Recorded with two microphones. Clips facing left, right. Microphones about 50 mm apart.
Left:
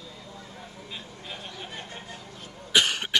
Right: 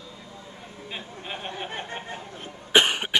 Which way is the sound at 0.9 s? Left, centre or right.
Right.